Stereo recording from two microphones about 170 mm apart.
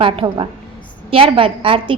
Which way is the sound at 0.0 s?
30° right (ahead or behind).